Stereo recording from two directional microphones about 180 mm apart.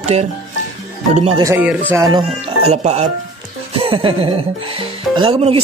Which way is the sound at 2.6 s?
35° right (ahead or behind).